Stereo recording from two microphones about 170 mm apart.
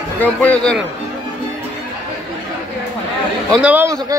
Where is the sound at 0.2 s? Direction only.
10° left (ahead or behind).